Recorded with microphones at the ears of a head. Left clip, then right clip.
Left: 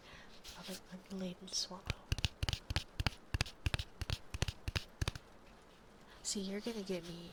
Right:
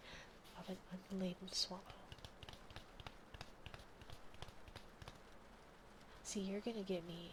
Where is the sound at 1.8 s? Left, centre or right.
Left.